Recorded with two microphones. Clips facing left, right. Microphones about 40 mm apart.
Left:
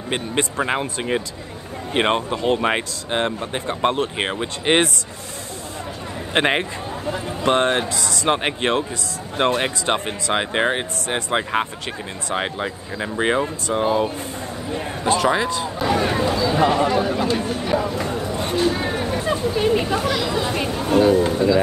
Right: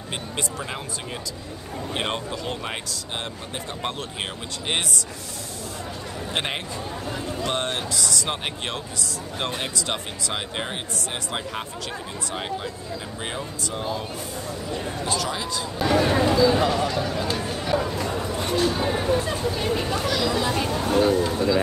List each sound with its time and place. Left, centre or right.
0.1 s speech: left
6.3 s speech: left
15.8 s speech: centre
16.2 s speech: centre
16.6 s speech: left
17.3 s a sound: centre